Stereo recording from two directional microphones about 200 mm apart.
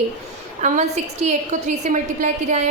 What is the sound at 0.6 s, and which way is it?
A woman's voice, 35° right (ahead or behind).